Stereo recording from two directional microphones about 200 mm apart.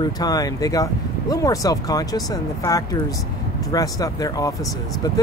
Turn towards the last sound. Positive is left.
turn(degrees=15)  # may be behind; listen again after turning